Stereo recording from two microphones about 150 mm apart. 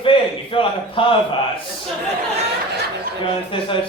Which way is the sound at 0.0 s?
35° left (ahead or behind).